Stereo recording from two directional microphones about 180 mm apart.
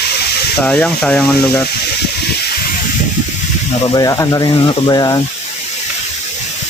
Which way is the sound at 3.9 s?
20° left (ahead or behind).